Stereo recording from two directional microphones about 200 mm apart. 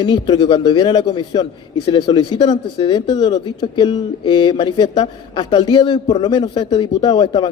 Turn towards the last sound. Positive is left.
turn(degrees=20)  # may be behind; listen again after turning